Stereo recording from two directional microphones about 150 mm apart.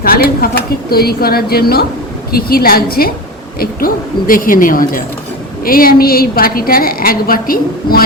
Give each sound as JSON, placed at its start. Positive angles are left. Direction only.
{"t": 0.0, "sound": "a woman's voice", "side_deg": 80}